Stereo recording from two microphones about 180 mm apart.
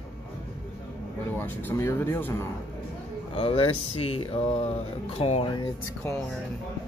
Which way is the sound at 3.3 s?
30° left (ahead or behind).